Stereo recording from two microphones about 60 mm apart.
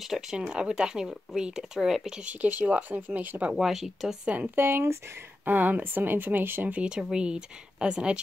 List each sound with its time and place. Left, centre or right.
0.0 s speech: centre
2.1 s speech: right
3.5 s speech: centre
4.6 s speech: right
5.4 s speech: right
6.7 s speech: centre